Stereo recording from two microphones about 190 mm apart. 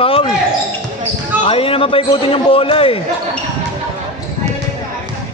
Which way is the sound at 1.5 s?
30° left (ahead or behind).